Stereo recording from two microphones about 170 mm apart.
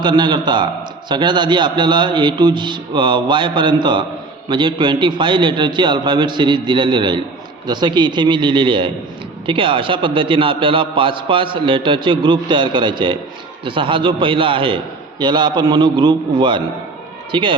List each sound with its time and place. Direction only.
0.0 s a man's voice: 25° right (ahead or behind)